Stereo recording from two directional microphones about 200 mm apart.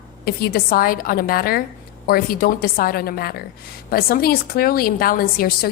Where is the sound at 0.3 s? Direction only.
50° left (ahead or behind).